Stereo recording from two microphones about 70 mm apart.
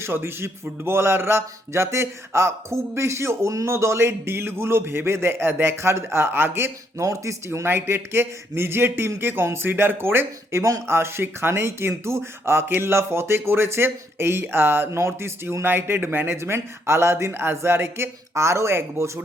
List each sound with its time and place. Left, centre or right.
0.0 s speech: right
7.0 s speech: right